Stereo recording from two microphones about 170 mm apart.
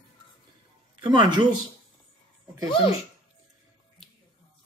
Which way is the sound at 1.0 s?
30° right (ahead or behind).